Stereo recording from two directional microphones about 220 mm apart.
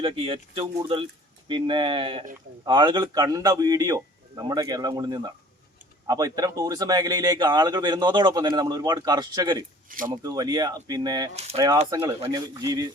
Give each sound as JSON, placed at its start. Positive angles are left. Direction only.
{"t": 0.0, "sound": "speech", "side_deg": -25}